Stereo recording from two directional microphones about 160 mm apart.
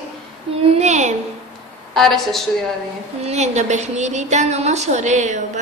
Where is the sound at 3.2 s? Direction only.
45° right (ahead or behind).